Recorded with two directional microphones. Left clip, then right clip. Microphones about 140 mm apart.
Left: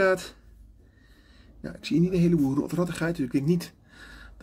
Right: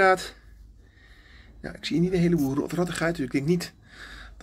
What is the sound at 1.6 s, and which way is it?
Speech, 30° left (ahead or behind).